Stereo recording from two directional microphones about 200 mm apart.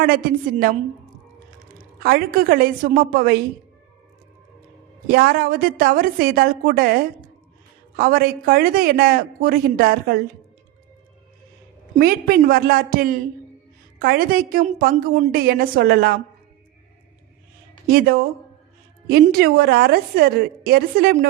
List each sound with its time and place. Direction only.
0.0 s speech: 45° right (ahead or behind)
2.0 s speech: 45° right (ahead or behind)
5.0 s speech: 50° right (ahead or behind)
11.9 s speech: 50° right (ahead or behind)
17.8 s speech: 50° right (ahead or behind)